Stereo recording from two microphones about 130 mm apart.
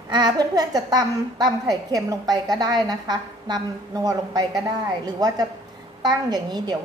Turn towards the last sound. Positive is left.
turn(degrees=-35)  # may be behind; listen again after turning